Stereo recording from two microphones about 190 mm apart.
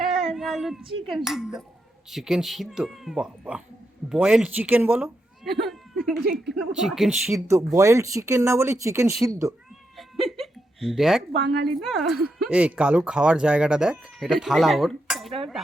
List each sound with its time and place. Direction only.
0.0 s child singing: centre (ahead or behind)
1.1 s speech: centre (ahead or behind)
7.4 s speech: 15° right (ahead or behind)
10.0 s a sound: centre (ahead or behind)
11.6 s speech: centre (ahead or behind)